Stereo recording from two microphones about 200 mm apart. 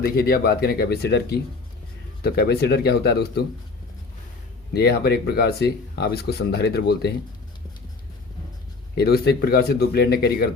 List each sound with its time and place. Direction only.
0.0 s speech: 50° left (ahead or behind)
4.7 s speech: 55° left (ahead or behind)
9.0 s speech: 50° left (ahead or behind)